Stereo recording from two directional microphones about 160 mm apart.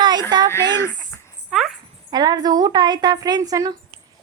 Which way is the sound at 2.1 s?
25° right (ahead or behind).